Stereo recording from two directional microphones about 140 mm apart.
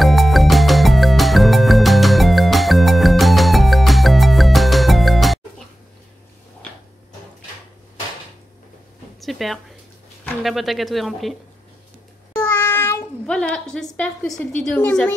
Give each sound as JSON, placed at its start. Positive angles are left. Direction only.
{"t": 0.0, "sound": "music", "side_deg": 0}
{"t": 9.2, "sound": "a sound", "side_deg": 0}
{"t": 10.4, "sound": "speech", "side_deg": 0}
{"t": 12.4, "sound": "child singing", "side_deg": 15}
{"t": 13.3, "sound": "a woman's voice", "side_deg": 5}